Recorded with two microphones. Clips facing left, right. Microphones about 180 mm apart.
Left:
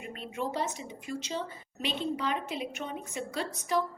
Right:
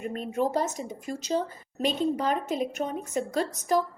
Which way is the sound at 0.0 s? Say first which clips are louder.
Right 8 dB; 45° right (ahead or behind).